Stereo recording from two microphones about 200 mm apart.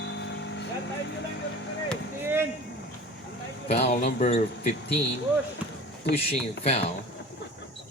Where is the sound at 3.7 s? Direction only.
35° left (ahead or behind).